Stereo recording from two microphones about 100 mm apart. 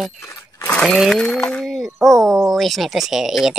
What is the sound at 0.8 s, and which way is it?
Speech, centre (ahead or behind).